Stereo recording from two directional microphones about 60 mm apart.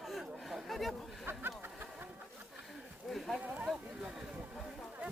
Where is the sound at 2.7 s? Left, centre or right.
Centre.